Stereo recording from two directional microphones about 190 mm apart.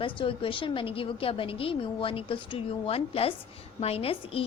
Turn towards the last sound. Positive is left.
turn(degrees=30)  # may be behind; listen again after turning